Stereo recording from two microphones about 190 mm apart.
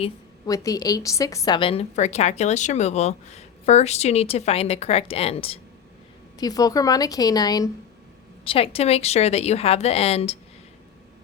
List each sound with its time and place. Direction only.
0.4 s a woman's voice: 20° left (ahead or behind)
6.4 s a woman's voice: 20° left (ahead or behind)
8.4 s a woman's voice: 30° left (ahead or behind)